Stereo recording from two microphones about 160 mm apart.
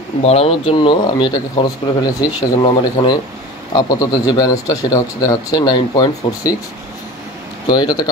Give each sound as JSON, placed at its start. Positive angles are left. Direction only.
{"t": 0.2, "sound": "speech", "side_deg": 40}
{"t": 7.6, "sound": "speech", "side_deg": 25}